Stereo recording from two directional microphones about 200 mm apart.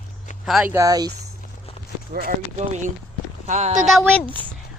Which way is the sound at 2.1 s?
45° right (ahead or behind).